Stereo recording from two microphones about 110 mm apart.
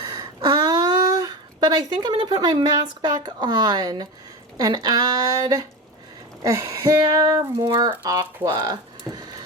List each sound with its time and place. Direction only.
0.1 s speech: 40° right (ahead or behind)